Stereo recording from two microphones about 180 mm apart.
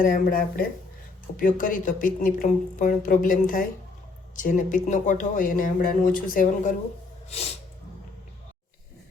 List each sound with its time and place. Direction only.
0.0 s speech: 50° left (ahead or behind)